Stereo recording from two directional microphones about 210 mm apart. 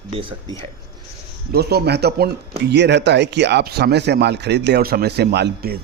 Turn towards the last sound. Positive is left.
turn(degrees=-50)  # may be behind; listen again after turning